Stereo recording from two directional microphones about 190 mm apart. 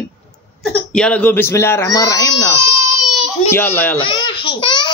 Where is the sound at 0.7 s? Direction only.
5° left (ahead or behind).